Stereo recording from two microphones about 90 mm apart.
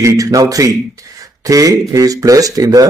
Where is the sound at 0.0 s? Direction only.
40° right (ahead or behind).